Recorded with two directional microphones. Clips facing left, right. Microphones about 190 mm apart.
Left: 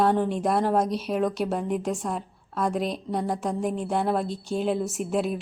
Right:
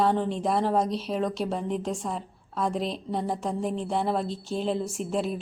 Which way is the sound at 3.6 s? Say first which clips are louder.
Left 2 dB; 10° left (ahead or behind).